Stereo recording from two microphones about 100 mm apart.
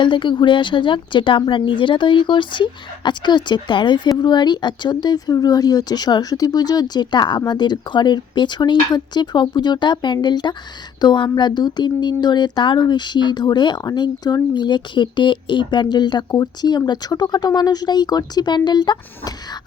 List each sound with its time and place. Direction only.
0.0 s a woman's voice: 55° left (ahead or behind)